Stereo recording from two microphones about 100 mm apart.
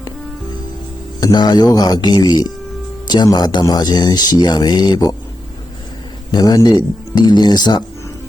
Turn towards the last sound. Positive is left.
turn(degrees=45)  # may be behind; listen again after turning